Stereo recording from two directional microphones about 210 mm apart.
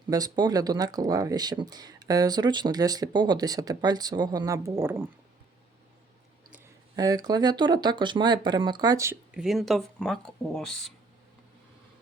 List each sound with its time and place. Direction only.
0.1 s speech: 20° right (ahead or behind)
6.9 s speech: 15° right (ahead or behind); by 10.9 s centre (ahead or behind)